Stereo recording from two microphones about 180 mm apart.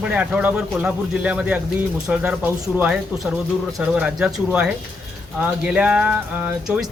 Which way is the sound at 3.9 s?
5° right (ahead or behind).